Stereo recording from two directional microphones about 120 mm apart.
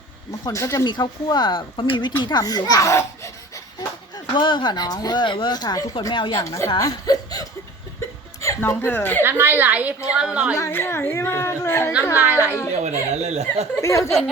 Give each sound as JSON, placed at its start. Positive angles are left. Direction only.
{"t": 0.3, "sound": "a woman's voice", "side_deg": 25}
{"t": 0.9, "sound": "speech", "side_deg": 40}
{"t": 2.2, "sound": "speech", "side_deg": 35}
{"t": 4.4, "sound": "speech", "side_deg": 40}
{"t": 6.3, "sound": "a woman's voice", "side_deg": 25}
{"t": 9.2, "sound": "a woman's voice", "side_deg": -15}
{"t": 10.5, "sound": "a woman's voice", "side_deg": 25}
{"t": 12.1, "sound": "a woman's voice", "side_deg": -15}
{"t": 12.8, "sound": "speech", "side_deg": -65}
{"t": 13.8, "sound": "a woman's voice", "side_deg": 25}